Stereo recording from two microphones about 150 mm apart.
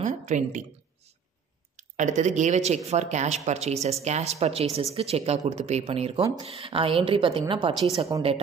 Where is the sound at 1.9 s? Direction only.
55° right (ahead or behind).